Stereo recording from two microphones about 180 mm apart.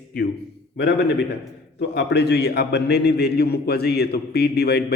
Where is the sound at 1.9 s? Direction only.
65° left (ahead or behind).